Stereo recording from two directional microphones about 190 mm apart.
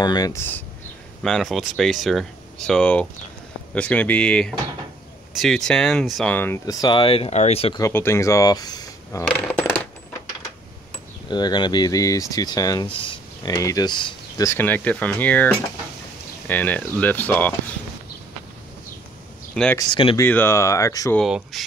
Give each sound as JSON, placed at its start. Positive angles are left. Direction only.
{"t": 0.0, "sound": "speech", "side_deg": 20}
{"t": 7.8, "sound": "speech", "side_deg": 15}
{"t": 9.4, "sound": "coin", "side_deg": 10}
{"t": 11.2, "sound": "speech", "side_deg": 25}
{"t": 14.5, "sound": "speech", "side_deg": 10}
{"t": 19.5, "sound": "speech", "side_deg": 5}
{"t": 19.8, "sound": "speech", "side_deg": 25}
{"t": 20.2, "sound": "speech", "side_deg": 10}
{"t": 21.2, "sound": "speech", "side_deg": 0}